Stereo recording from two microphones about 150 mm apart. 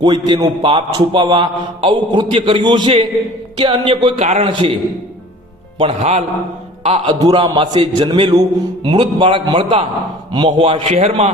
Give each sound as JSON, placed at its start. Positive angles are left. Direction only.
{"t": 0.0, "sound": "a man's voice", "side_deg": -30}
{"t": 4.2, "sound": "a man's voice", "side_deg": -50}
{"t": 4.4, "sound": "a man's voice", "side_deg": -35}
{"t": 5.8, "sound": "a man's voice", "side_deg": -45}
{"t": 7.2, "sound": "a man's voice", "side_deg": -25}